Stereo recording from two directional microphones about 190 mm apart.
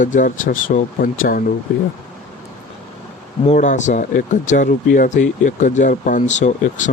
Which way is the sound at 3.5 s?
40° left (ahead or behind).